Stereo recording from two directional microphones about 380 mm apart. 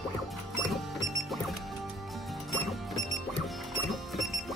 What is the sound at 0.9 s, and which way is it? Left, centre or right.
Music, centre.